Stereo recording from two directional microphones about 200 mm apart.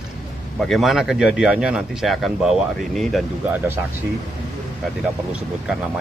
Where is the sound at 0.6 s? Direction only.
Centre (ahead or behind).